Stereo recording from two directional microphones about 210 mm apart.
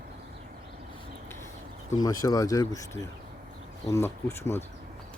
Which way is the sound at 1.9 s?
15° left (ahead or behind).